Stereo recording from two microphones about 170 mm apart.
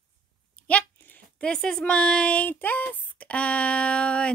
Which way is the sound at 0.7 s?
10° left (ahead or behind).